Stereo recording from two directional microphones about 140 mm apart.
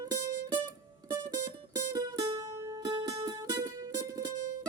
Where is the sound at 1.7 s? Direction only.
25° right (ahead or behind).